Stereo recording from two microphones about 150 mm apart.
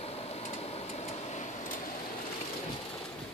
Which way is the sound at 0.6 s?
45° left (ahead or behind).